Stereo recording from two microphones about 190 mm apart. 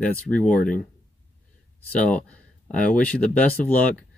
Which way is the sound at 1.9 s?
5° left (ahead or behind).